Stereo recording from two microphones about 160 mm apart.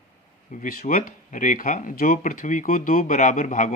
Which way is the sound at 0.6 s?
65° left (ahead or behind).